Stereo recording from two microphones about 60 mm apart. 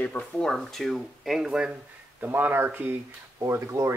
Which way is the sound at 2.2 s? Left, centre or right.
Right.